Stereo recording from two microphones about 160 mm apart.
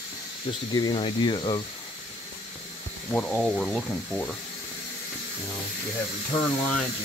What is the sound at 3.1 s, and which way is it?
Speech, 10° left (ahead or behind).